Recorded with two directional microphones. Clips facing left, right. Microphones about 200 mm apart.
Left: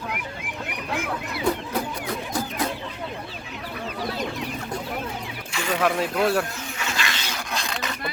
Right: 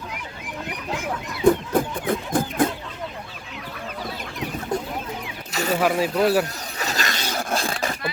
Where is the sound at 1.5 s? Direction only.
50° right (ahead or behind).